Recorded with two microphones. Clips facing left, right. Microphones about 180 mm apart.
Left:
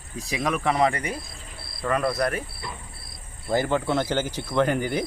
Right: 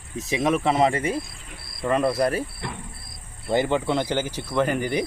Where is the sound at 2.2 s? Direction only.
30° right (ahead or behind).